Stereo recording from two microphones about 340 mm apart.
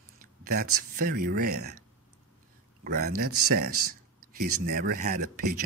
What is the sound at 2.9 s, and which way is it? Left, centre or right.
Speech, right.